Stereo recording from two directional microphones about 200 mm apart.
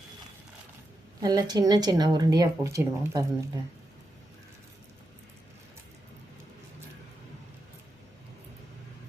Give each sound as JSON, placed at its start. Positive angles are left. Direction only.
{"t": 1.2, "sound": "a woman's voice", "side_deg": -20}